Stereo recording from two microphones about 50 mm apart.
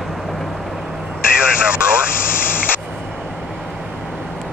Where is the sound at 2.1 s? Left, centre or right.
Left.